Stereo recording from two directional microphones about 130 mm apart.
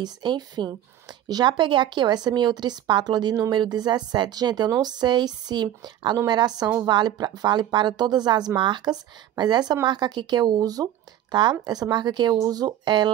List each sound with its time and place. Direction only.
0.0 s a woman's voice: 35° right (ahead or behind)